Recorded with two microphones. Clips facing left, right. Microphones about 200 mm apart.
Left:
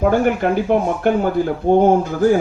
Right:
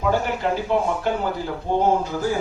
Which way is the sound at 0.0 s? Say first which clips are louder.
Left 6 dB; 55° left (ahead or behind).